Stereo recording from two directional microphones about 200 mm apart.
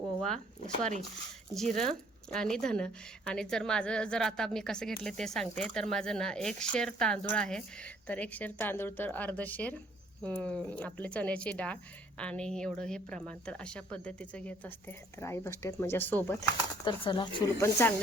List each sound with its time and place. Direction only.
1.5 s a woman's voice: 5° left (ahead or behind)
16.8 s speech: 25° left (ahead or behind)